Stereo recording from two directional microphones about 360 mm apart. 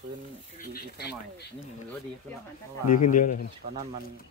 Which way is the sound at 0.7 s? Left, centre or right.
Left.